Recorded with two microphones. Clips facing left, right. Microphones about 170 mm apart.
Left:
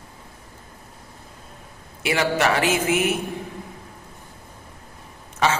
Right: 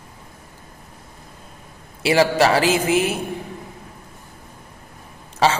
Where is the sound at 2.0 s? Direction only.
30° right (ahead or behind).